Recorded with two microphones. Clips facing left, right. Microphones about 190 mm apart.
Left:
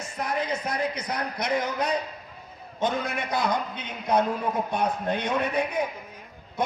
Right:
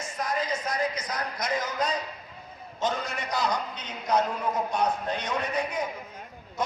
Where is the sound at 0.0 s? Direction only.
60° left (ahead or behind).